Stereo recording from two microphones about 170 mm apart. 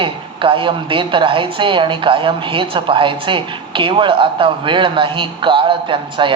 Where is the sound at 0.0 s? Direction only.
30° right (ahead or behind).